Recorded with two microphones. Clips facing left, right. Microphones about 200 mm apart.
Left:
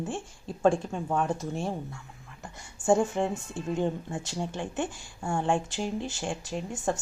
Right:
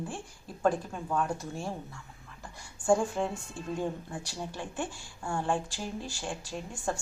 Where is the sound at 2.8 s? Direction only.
25° left (ahead or behind).